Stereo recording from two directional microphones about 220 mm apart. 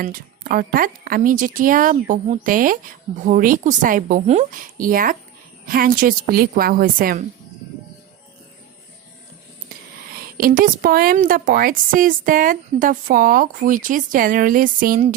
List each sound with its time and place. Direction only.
0.0 s speech: 40° right (ahead or behind)
10.3 s speech: 40° right (ahead or behind)